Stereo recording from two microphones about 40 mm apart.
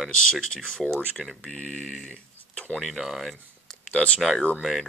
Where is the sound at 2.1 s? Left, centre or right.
Left.